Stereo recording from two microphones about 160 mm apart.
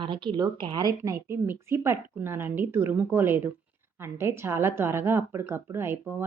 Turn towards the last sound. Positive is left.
turn(degrees=-15)  # may be behind; listen again after turning